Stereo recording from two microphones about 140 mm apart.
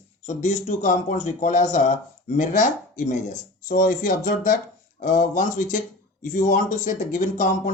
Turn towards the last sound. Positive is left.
turn(degrees=70)  # may be behind; listen again after turning